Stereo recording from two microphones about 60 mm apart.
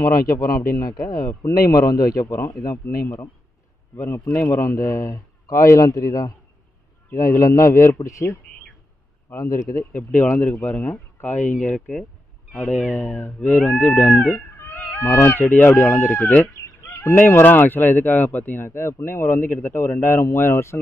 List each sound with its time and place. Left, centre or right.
0.0 s a man's voice: left
0.8 s a man's voice: left
3.9 s speech: left
4.3 s speech: left
4.6 s a man's voice: left
7.1 s a man's voice: left
10.2 s speech: left
13.2 s speech: left
15.0 s a man's voice: left
16.0 s speech: left
16.5 s fowl: left
17.2 s speech: left